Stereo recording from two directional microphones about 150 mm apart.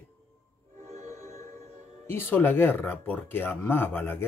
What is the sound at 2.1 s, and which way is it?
A man's voice, 15° left (ahead or behind).